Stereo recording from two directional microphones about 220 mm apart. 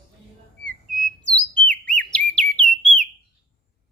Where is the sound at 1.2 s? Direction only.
5° left (ahead or behind).